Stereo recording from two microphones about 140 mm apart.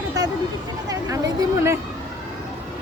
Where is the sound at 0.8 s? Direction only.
25° right (ahead or behind).